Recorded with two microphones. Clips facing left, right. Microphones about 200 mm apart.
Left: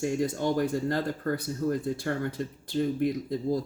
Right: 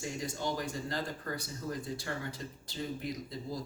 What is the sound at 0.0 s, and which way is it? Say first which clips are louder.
Speech: left 9 dB; 55° left (ahead or behind).